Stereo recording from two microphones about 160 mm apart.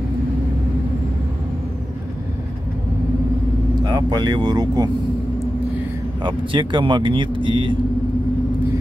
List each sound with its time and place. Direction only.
3.8 s speech: 25° right (ahead or behind)
6.2 s speech: 30° right (ahead or behind)